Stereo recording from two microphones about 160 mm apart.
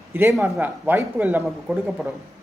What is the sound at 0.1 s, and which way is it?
A man's voice, 15° right (ahead or behind).